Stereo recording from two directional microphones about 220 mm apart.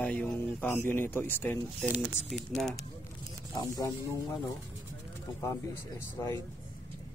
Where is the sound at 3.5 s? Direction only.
15° left (ahead or behind).